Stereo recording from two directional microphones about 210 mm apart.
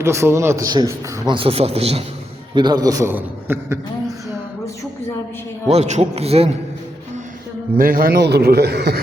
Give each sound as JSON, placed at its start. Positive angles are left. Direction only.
{"t": 0.0, "sound": "a man's voice", "side_deg": -15}
{"t": 5.6, "sound": "a man's voice", "side_deg": -30}
{"t": 7.8, "sound": "a man's voice", "side_deg": -40}